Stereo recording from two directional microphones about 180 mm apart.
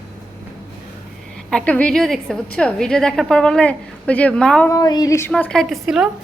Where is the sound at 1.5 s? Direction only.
5° left (ahead or behind).